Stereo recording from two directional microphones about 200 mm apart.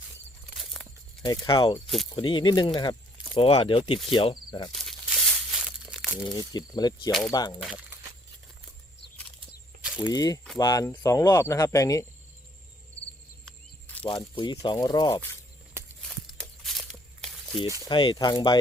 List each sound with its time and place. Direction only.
0.5 s a sound: centre (ahead or behind)
1.2 s speech: 20° left (ahead or behind)
4.7 s crumpling: centre (ahead or behind)
6.5 s speech: 20° left (ahead or behind)
7.6 s speech: 5° right (ahead or behind)
9.8 s cricket: 5° right (ahead or behind)
10.1 s speech: 20° left (ahead or behind)
13.4 s a sound: 5° left (ahead or behind)
14.1 s speech: 25° left (ahead or behind)
15.8 s walk: 10° right (ahead or behind)
16.2 s a sound: centre (ahead or behind)
17.8 s speech: 25° left (ahead or behind)